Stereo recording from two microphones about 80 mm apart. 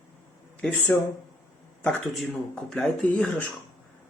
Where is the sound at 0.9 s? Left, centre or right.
Left.